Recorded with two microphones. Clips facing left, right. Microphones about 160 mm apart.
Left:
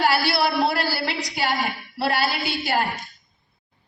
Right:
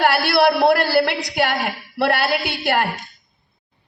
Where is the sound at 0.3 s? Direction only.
60° right (ahead or behind).